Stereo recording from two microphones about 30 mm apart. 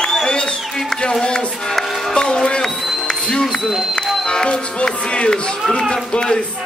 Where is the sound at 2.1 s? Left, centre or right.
Left.